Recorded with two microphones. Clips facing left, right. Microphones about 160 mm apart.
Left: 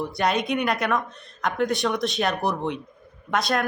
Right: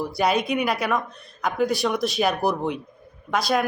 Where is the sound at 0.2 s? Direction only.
5° right (ahead or behind).